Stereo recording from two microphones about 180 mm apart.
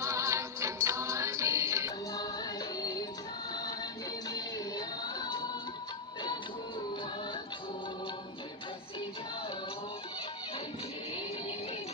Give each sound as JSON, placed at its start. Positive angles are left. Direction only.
{"t": 0.0, "sound": "music", "side_deg": -15}
{"t": 4.3, "sound": "music", "side_deg": 20}